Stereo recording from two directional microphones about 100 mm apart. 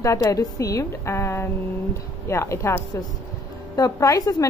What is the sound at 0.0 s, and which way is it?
A woman's voice, 35° left (ahead or behind).